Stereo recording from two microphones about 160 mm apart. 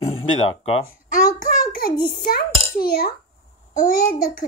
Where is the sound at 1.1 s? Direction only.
60° left (ahead or behind).